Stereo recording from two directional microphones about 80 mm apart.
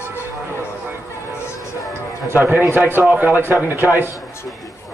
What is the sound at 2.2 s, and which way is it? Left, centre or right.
Speech, right.